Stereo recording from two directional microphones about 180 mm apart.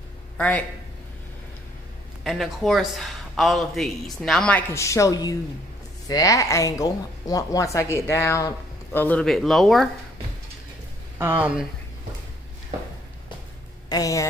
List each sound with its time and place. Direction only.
0.4 s a woman's voice: 10° left (ahead or behind)
2.2 s a man's voice: centre (ahead or behind)
13.8 s a woman's voice: 20° left (ahead or behind)